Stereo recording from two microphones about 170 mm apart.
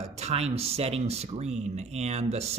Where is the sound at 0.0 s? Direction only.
40° right (ahead or behind).